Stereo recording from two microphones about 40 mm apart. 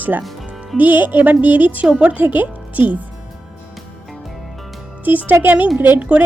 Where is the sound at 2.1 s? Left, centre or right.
Right.